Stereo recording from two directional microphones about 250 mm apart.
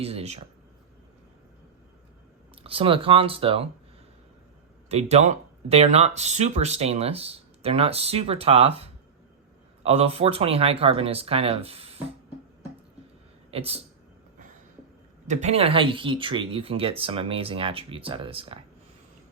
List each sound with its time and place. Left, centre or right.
0.0 s speech: right
2.6 s speech: right
4.9 s speech: right
13.5 s speech: right
15.3 s speech: right